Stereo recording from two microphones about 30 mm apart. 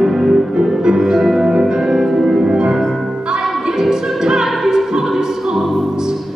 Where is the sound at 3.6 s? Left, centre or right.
Centre.